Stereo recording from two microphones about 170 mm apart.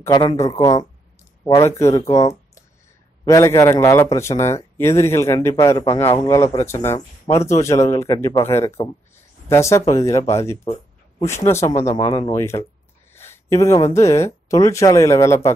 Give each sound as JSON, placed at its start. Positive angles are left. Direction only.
{"t": 0.1, "sound": "speech", "side_deg": 25}
{"t": 1.8, "sound": "speech", "side_deg": 15}
{"t": 3.3, "sound": "speech", "side_deg": 20}